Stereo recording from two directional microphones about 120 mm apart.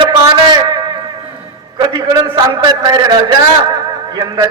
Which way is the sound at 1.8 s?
35° right (ahead or behind).